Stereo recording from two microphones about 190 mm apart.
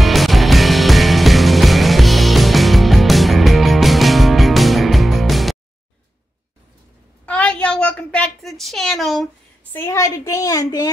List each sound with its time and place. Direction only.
0.0 s music: centre (ahead or behind)
7.2 s a sound: 5° left (ahead or behind)
9.8 s a woman's voice: 15° left (ahead or behind)